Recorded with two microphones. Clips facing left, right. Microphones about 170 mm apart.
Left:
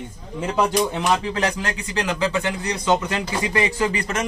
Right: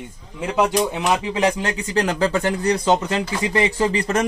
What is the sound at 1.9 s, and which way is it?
Speech, 35° right (ahead or behind).